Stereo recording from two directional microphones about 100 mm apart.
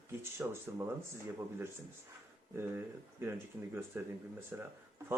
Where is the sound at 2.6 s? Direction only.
20° right (ahead or behind).